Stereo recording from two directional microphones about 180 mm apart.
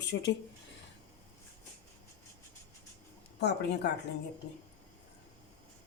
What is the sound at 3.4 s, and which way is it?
Speech, 70° left (ahead or behind).